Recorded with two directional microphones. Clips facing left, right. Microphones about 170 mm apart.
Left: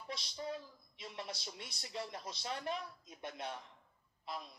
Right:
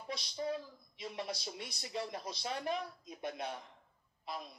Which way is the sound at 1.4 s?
15° right (ahead or behind).